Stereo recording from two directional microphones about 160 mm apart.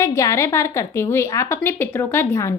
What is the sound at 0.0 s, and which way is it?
Speech, 20° left (ahead or behind).